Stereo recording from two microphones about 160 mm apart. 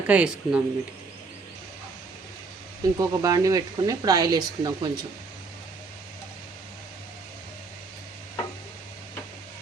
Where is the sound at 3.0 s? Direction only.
20° right (ahead or behind).